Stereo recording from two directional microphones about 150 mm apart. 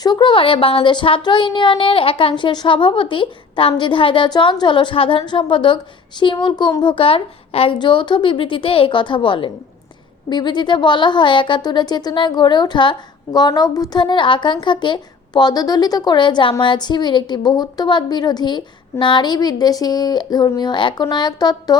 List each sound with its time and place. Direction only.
0.0 s a woman's voice: 30° left (ahead or behind)